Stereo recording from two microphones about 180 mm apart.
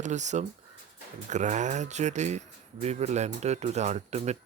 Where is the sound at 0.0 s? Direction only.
40° right (ahead or behind).